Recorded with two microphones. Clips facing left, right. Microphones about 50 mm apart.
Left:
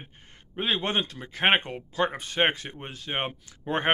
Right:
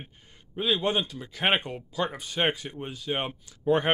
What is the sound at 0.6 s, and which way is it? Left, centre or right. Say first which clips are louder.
Speech: right 1 dB; left.